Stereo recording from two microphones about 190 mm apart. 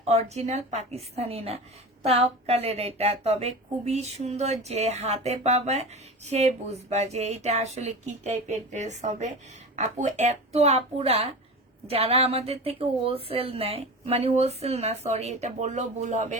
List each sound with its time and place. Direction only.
0.0 s speech: 35° right (ahead or behind)